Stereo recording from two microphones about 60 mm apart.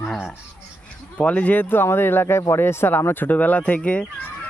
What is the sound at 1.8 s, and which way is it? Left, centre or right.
Speech, left.